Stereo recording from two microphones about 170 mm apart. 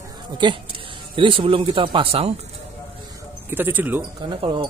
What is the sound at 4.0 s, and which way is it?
Speech, 30° right (ahead or behind).